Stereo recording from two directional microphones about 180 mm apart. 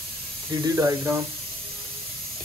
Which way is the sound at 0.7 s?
15° right (ahead or behind).